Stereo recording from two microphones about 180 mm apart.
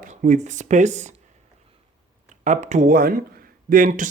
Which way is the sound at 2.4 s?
40° right (ahead or behind).